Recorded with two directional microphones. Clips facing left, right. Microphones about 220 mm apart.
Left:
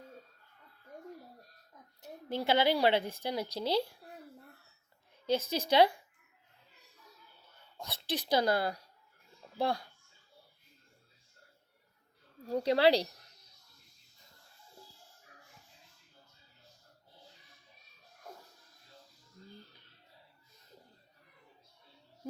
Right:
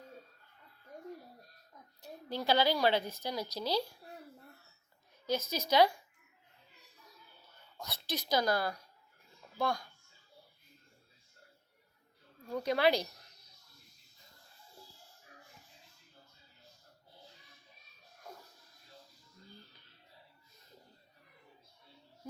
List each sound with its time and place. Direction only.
2.0 s a woman's voice: 20° left (ahead or behind)
5.2 s a woman's voice: 30° left (ahead or behind)
7.8 s a woman's voice: 30° left (ahead or behind)
12.5 s speech: 35° left (ahead or behind)